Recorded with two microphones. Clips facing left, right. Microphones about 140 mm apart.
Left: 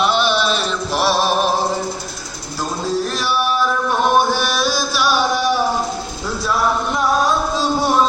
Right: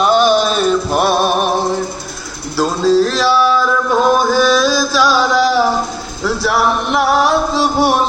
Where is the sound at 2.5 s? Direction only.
85° right.